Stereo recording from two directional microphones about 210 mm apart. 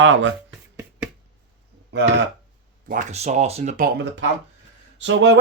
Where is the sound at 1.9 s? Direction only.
55° right (ahead or behind).